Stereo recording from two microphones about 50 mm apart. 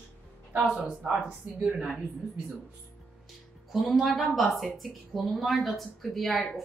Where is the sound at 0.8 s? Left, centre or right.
Centre.